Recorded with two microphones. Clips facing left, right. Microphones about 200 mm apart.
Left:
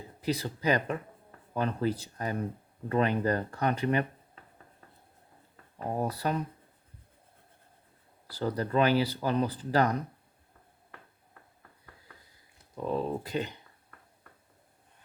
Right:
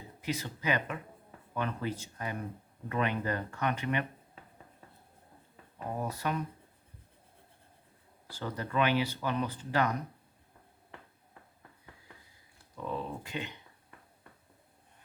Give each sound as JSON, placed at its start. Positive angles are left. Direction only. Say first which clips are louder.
{"t": 0.2, "sound": "speech", "louder": "left 5 dB", "side_deg": 35}
{"t": 6.0, "sound": "speech", "louder": "left 4 dB", "side_deg": 35}
{"t": 8.3, "sound": "speech", "louder": "left 7 dB", "side_deg": 35}
{"t": 12.7, "sound": "speech", "louder": "left 6 dB", "side_deg": 35}